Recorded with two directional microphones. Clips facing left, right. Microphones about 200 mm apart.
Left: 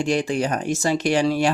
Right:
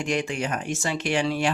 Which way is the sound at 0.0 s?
35° left (ahead or behind).